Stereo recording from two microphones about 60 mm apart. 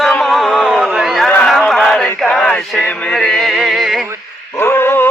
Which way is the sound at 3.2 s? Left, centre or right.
Centre.